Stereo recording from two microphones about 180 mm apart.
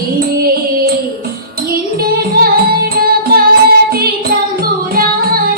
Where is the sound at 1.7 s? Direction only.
55° right (ahead or behind).